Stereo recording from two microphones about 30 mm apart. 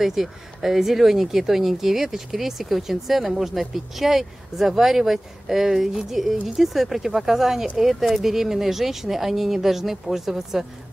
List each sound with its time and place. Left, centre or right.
0.0 s speech: centre